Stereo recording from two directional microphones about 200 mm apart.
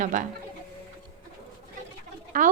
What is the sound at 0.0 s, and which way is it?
Speech, 40° right (ahead or behind).